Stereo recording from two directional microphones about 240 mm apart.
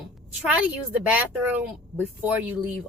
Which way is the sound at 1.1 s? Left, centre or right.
Centre.